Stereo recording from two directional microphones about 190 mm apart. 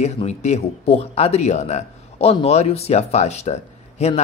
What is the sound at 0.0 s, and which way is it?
Speech, 35° left (ahead or behind).